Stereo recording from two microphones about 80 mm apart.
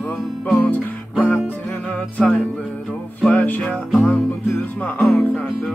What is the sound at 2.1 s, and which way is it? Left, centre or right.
Music, centre.